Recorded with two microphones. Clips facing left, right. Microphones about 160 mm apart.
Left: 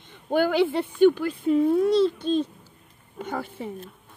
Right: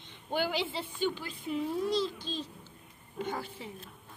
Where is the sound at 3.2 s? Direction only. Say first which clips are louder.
Left 5 dB; 50° left (ahead or behind).